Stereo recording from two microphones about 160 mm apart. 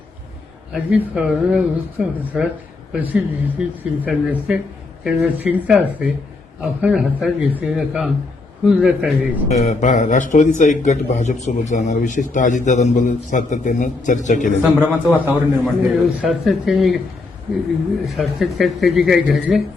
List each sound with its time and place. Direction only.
0.7 s a man's voice: 5° right (ahead or behind)
9.5 s a man's voice: 45° left (ahead or behind)
14.9 s a man's voice: 10° right (ahead or behind)
18.2 s a man's voice: centre (ahead or behind)